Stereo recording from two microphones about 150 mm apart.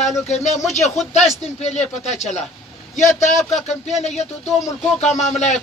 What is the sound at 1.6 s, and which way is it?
A man's voice, 50° left (ahead or behind).